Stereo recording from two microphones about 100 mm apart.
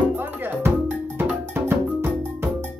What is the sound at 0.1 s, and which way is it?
Music, 20° right (ahead or behind).